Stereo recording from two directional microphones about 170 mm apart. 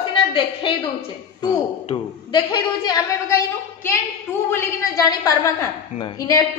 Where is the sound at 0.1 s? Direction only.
30° left (ahead or behind).